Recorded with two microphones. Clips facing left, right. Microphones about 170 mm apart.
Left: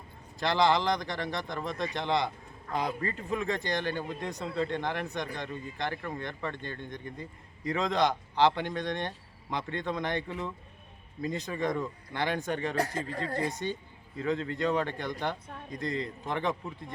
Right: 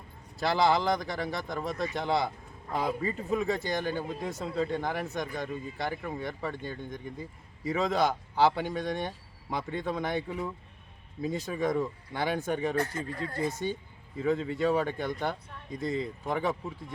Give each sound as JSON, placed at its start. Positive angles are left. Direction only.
{"t": 0.3, "sound": "speech", "side_deg": -5}
{"t": 12.8, "sound": "speech", "side_deg": 35}
{"t": 13.5, "sound": "speech", "side_deg": -10}